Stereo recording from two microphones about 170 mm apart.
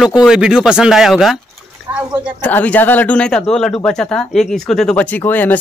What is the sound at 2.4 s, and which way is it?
Speech, 10° left (ahead or behind).